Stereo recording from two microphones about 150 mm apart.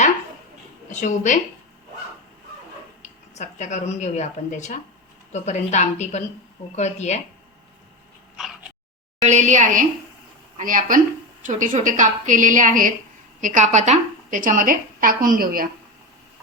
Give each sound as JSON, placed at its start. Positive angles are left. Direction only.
{"t": 0.9, "sound": "speech", "side_deg": 55}
{"t": 3.0, "sound": "a woman's voice", "side_deg": 50}
{"t": 9.2, "sound": "a woman's voice", "side_deg": -55}